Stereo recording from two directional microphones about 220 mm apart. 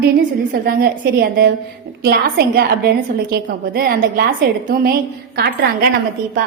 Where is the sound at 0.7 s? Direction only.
45° right (ahead or behind).